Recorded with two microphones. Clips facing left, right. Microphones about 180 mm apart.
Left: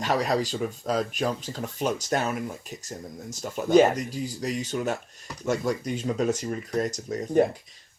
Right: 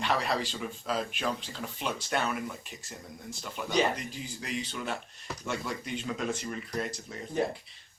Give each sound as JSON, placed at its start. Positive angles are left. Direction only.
{"t": 0.0, "sound": "speech", "side_deg": 40}